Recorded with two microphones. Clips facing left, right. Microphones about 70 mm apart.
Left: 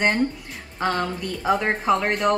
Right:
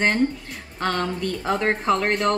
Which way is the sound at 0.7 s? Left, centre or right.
Centre.